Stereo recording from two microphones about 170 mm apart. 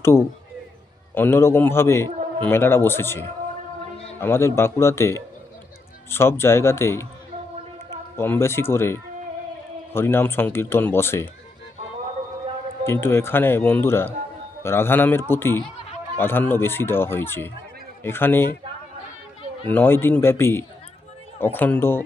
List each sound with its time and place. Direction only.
0.0 s speech: 15° left (ahead or behind)
8.2 s speech: 15° left (ahead or behind)
12.8 s speech: 15° left (ahead or behind)
19.7 s speech: 10° left (ahead or behind)